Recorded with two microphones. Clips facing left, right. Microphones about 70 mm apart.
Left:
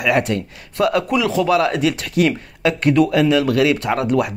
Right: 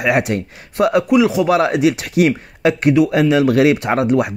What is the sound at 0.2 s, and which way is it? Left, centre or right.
Speech, right.